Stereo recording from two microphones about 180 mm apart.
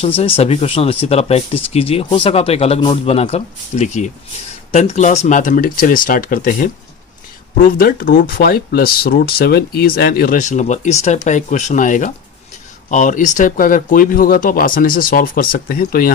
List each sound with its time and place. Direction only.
0.2 s speech: 35° left (ahead or behind); by 16.1 s 55° left (ahead or behind)